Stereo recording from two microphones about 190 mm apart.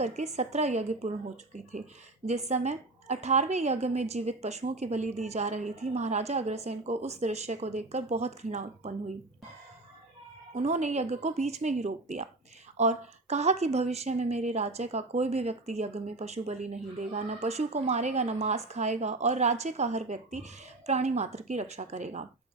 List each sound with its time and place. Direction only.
0.0 s speech: 35° right (ahead or behind)
2.2 s speech: 35° right (ahead or behind)
10.5 s speech: 35° right (ahead or behind)